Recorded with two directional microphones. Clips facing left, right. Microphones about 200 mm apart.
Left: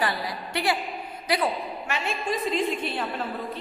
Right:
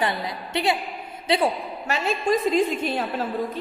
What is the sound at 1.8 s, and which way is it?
A woman's voice, 40° right (ahead or behind).